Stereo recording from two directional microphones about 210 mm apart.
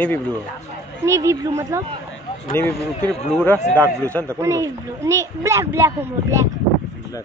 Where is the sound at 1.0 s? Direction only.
15° right (ahead or behind).